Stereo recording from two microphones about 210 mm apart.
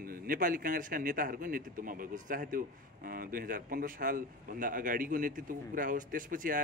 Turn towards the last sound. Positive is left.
turn(degrees=-40)  # may be behind; listen again after turning